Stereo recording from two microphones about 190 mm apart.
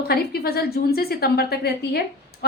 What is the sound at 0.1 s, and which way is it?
A woman's voice, 55° left (ahead or behind).